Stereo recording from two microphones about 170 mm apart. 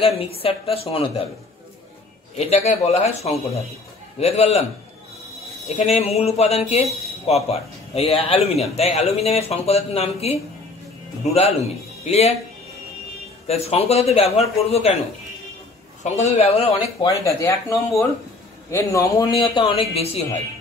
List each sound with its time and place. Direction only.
0.2 s speech: 35° left (ahead or behind)
2.3 s speech: 40° left (ahead or behind)
5.9 s speech: 40° left (ahead or behind)
12.0 s speech: 40° left (ahead or behind)
13.5 s speech: 40° left (ahead or behind)
16.0 s speech: 40° left (ahead or behind)
17.0 s speech: 20° left (ahead or behind)
19.3 s speech: 30° left (ahead or behind)